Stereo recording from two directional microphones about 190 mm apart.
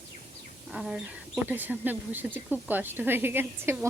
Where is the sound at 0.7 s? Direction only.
5° right (ahead or behind).